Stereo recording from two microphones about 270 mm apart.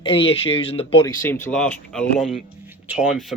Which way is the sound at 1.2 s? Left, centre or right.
Centre.